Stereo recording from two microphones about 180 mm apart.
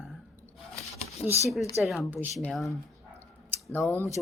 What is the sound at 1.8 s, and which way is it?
A woman's voice, centre (ahead or behind).